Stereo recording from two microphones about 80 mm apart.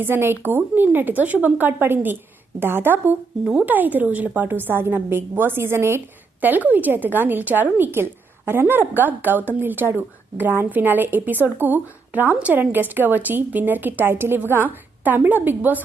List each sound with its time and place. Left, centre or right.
0.0 s a woman's voice: right
3.4 s speech: centre
3.7 s a woman's voice: right
6.4 s a woman's voice: right